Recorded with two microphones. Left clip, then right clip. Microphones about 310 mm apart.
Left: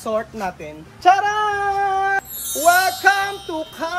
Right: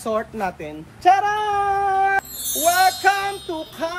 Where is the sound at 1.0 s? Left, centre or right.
Centre.